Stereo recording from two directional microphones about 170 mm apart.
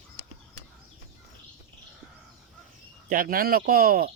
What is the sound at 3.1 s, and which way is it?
Speech, 55° right (ahead or behind).